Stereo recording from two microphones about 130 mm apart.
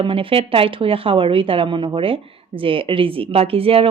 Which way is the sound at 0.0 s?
45° right (ahead or behind).